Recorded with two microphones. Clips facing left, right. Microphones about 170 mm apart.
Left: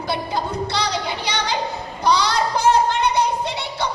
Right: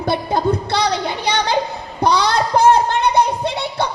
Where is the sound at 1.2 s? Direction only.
55° right (ahead or behind).